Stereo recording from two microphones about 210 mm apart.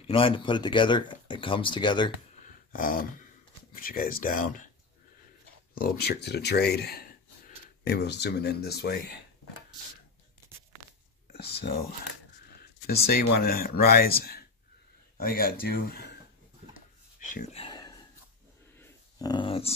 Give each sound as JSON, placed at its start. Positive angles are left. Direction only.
{"t": 0.0, "sound": "speech", "side_deg": 25}
{"t": 2.4, "sound": "a sound", "side_deg": 40}
{"t": 3.7, "sound": "speech", "side_deg": 45}
{"t": 5.8, "sound": "speech", "side_deg": 45}
{"t": 12.8, "sound": "speech", "side_deg": 45}
{"t": 17.5, "sound": "a sound", "side_deg": 25}